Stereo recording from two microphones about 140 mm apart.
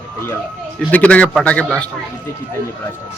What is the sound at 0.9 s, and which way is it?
Speech, 10° left (ahead or behind).